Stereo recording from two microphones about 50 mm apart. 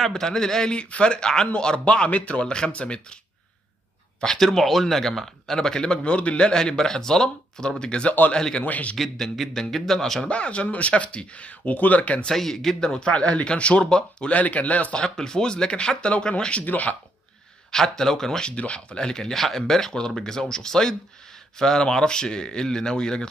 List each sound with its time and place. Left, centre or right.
0.0 s speech: centre
4.2 s speech: centre
8.6 s speech: left
8.9 s a man's voice: centre
10.2 s speech: left
12.3 s speech: centre
14.3 s speech: left
15.0 s speech: centre
16.6 s speech: left
17.6 s speech: centre
18.5 s speech: left